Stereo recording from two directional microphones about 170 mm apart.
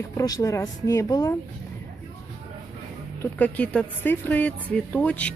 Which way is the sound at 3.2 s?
10° left (ahead or behind).